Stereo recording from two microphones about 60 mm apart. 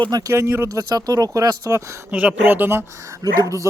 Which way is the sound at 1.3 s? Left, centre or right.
Right.